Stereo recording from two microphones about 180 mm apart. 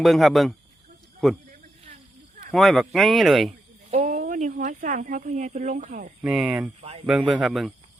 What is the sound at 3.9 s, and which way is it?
Speech, 40° right (ahead or behind).